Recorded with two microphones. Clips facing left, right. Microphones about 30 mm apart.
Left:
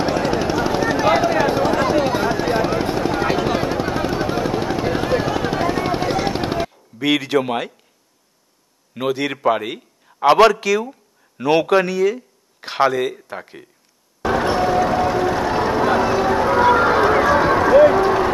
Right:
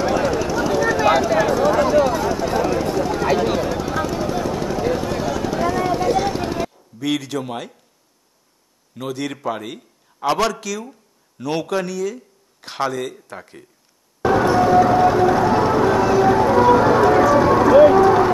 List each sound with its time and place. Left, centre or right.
0.0 s helicopter: left
1.0 s vehicle: left
6.1 s gunshot: left
8.9 s a man's voice: left
14.4 s a sound: left
14.7 s a sound: centre
16.4 s run: left
17.7 s run: centre